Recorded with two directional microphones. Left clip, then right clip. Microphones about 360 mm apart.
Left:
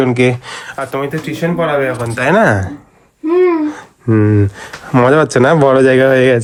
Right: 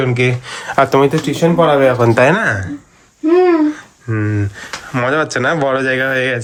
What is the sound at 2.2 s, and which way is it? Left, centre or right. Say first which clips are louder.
Speech: left 1 dB; centre.